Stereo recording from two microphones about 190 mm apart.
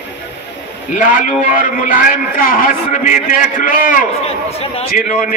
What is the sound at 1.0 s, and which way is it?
A man's voice, 45° left (ahead or behind).